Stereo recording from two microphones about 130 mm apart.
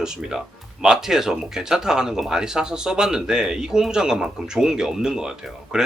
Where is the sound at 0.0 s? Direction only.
5° right (ahead or behind).